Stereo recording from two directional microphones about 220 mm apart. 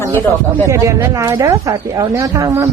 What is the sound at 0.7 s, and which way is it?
Speech, 15° right (ahead or behind).